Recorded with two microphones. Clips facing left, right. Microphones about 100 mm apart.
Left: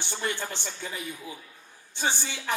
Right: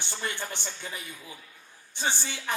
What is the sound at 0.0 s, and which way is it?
A woman's voice, 20° left (ahead or behind).